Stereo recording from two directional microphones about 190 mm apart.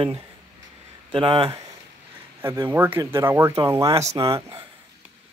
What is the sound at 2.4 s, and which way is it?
Speech, 15° right (ahead or behind).